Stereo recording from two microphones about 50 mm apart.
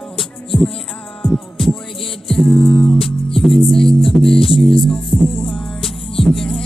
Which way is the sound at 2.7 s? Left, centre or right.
Centre.